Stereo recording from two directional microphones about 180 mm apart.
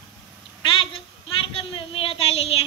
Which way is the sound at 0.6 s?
30° left (ahead or behind).